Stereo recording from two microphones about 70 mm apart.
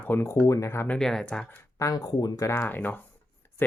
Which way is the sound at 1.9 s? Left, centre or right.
Left.